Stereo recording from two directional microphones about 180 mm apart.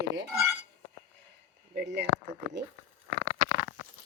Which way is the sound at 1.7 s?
70° right (ahead or behind).